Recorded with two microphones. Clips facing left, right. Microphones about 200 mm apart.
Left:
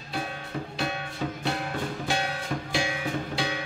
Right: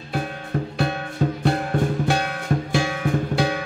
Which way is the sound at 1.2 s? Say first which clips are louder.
Right 9 dB; 45° right (ahead or behind).